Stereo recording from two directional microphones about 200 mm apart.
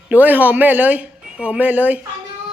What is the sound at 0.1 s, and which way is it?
Speech, 10° right (ahead or behind).